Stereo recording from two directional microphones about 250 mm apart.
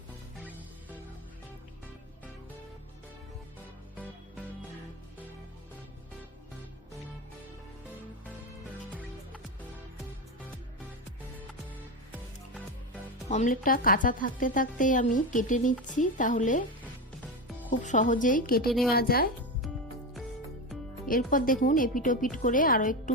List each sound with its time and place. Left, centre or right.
13.2 s a woman's voice: left
17.7 s a woman's voice: left
21.1 s a woman's voice: left